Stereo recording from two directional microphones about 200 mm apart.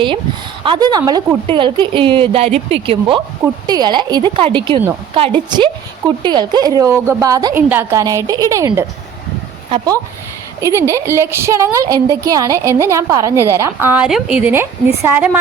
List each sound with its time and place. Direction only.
0.6 s a woman's voice: 20° right (ahead or behind)